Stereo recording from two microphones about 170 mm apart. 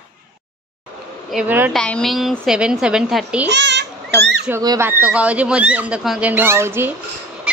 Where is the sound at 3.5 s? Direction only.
90° right.